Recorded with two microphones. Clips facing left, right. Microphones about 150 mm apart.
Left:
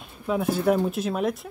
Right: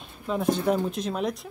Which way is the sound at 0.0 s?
5° left (ahead or behind).